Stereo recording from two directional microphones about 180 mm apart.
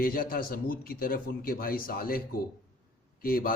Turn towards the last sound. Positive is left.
turn(degrees=55)  # may be behind; listen again after turning